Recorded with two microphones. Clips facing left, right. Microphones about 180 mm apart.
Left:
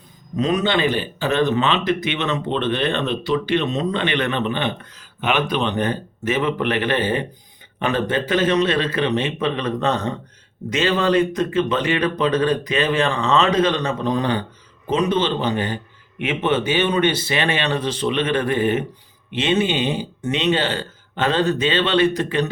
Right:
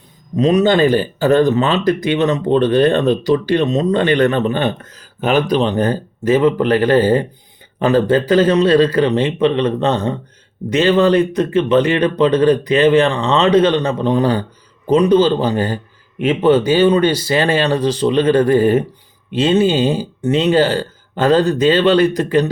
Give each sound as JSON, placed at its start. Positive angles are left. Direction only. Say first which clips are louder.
{"t": 0.3, "sound": "a man's voice", "louder": "right 7 dB", "side_deg": -35}
{"t": 21.9, "sound": "speech", "louder": "right 4 dB", "side_deg": 25}